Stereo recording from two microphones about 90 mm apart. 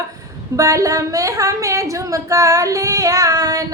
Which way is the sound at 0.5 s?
40° right (ahead or behind).